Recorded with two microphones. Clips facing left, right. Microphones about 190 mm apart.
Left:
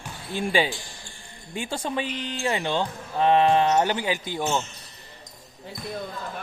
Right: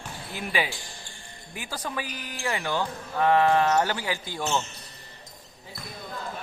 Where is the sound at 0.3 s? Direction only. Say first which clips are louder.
Left 6 dB; 30° left (ahead or behind).